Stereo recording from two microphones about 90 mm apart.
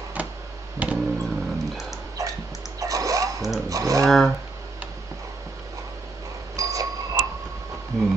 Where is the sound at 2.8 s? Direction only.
40° right (ahead or behind).